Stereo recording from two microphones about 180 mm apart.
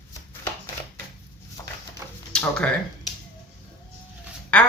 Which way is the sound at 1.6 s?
15° left (ahead or behind).